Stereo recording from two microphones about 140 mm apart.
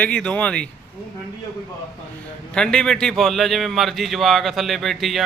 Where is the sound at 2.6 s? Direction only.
5° left (ahead or behind).